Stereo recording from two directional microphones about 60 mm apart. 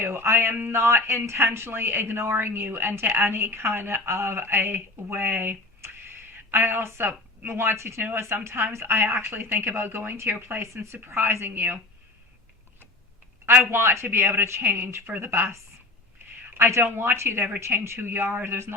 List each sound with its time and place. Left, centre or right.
0.0 s a woman's voice: right
7.0 s a woman's voice: right
7.5 s a woman's voice: right
10.6 s a woman's voice: right
13.4 s a woman's voice: right
16.6 s a woman's voice: right